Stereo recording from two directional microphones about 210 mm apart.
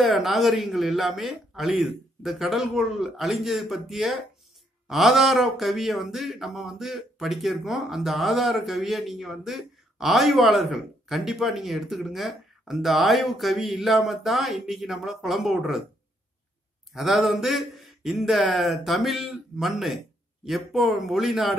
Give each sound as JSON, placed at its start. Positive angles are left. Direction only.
{"t": 0.1, "sound": "speech", "side_deg": 0}
{"t": 16.9, "sound": "speech", "side_deg": 0}